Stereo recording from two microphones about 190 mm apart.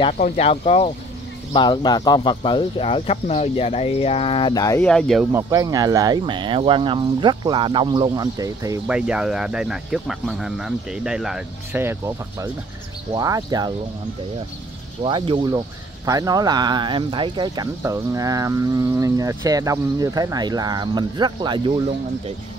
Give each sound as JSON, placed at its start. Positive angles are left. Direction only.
{"t": 0.2, "sound": "speech", "side_deg": 30}
{"t": 4.8, "sound": "speech", "side_deg": 5}
{"t": 5.3, "sound": "speech", "side_deg": -20}
{"t": 8.8, "sound": "speech", "side_deg": -5}
{"t": 15.0, "sound": "speech", "side_deg": -25}